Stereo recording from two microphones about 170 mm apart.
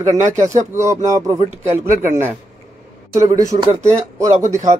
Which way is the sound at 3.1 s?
20° right (ahead or behind).